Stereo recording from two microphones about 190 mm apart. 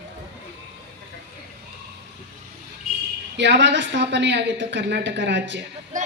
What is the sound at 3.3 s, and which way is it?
A woman's voice, 65° right (ahead or behind).